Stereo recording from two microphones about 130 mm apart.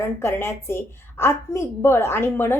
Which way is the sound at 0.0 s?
20° left (ahead or behind).